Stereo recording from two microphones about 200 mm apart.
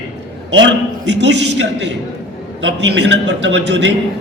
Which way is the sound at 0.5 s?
65° right (ahead or behind).